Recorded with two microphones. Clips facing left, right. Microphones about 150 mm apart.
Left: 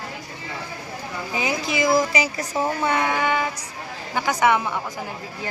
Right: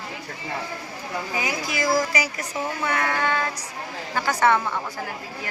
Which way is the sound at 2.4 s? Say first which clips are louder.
Left 4 dB; 30° left (ahead or behind).